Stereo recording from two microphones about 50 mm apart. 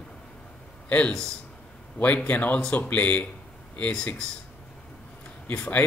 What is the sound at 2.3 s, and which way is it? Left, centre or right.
Speech, left.